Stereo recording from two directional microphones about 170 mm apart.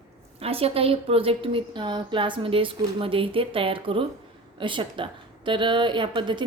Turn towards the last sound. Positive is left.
turn(degrees=-25)  # may be behind; listen again after turning